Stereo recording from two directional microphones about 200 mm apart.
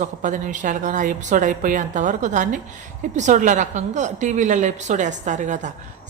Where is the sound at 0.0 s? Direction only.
40° right (ahead or behind).